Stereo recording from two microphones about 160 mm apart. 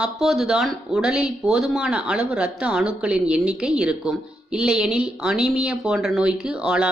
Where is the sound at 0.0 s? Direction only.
Centre (ahead or behind).